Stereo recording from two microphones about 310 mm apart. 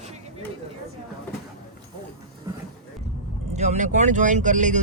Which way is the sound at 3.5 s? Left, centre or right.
Right.